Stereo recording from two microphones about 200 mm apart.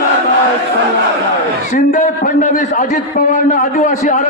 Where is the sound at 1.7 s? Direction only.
40° left (ahead or behind).